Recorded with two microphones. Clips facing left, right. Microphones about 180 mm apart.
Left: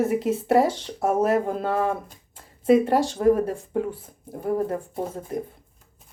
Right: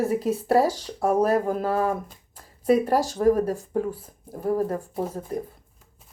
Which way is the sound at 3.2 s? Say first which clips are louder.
Even; 25° left (ahead or behind).